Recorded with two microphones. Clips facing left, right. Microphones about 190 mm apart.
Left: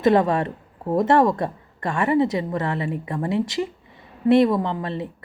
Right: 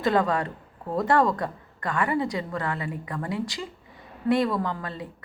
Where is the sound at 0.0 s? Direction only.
25° left (ahead or behind).